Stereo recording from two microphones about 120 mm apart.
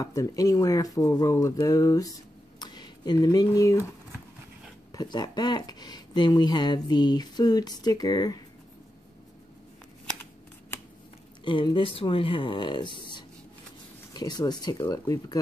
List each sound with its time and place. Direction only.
0.0 s speech: 30° left (ahead or behind)
4.9 s speech: 35° left (ahead or behind)
11.4 s speech: 45° left (ahead or behind)